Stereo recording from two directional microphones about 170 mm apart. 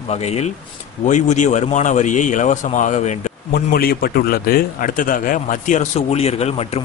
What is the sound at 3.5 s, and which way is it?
A man's voice, 60° left (ahead or behind).